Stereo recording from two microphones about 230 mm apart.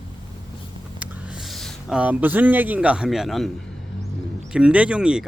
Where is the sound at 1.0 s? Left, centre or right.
Centre.